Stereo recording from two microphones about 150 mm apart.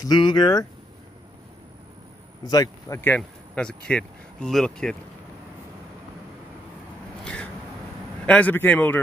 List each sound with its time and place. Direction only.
0.0 s a man's voice: 30° left (ahead or behind)
2.4 s a man's voice: 25° left (ahead or behind)
3.2 s speech: 5° left (ahead or behind)
8.3 s a man's voice: 10° left (ahead or behind)